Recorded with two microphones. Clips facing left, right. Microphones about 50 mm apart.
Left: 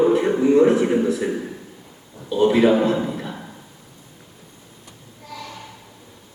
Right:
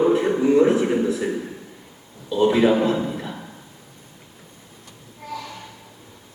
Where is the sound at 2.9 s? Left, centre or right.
Centre.